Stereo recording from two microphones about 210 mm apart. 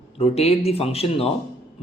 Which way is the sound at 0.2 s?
30° left (ahead or behind).